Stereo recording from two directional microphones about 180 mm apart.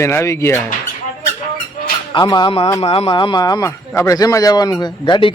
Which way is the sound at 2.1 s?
25° left (ahead or behind).